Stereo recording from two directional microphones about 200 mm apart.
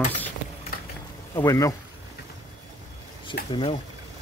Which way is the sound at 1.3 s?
15° left (ahead or behind).